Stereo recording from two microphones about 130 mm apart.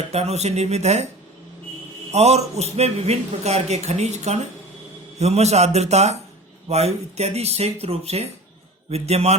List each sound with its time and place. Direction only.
0.1 s a man's voice: 55° right (ahead or behind)
2.1 s a man's voice: 55° right (ahead or behind)